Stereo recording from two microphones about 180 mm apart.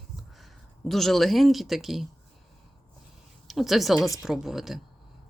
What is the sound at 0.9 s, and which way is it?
Speech, centre (ahead or behind).